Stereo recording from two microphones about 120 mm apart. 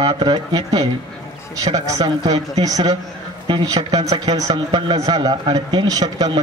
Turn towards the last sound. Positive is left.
turn(degrees=-35)  # may be behind; listen again after turning